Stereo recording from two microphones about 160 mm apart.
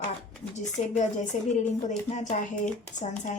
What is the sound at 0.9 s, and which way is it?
A woman's voice, 50° left (ahead or behind).